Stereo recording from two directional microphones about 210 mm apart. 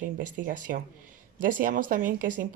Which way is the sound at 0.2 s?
40° right (ahead or behind).